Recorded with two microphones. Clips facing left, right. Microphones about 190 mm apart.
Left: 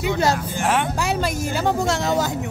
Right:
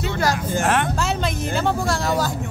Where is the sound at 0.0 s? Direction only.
20° left (ahead or behind).